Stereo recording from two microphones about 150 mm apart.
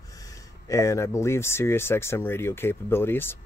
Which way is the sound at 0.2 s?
20° left (ahead or behind).